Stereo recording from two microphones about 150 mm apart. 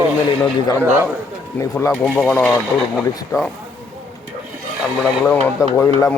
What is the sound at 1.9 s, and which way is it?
Speech, centre (ahead or behind).